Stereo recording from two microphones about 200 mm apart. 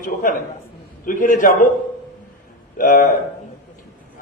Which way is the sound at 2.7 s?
40° left (ahead or behind).